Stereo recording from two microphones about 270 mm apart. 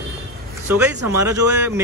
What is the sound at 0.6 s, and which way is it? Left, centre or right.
A man's voice, centre.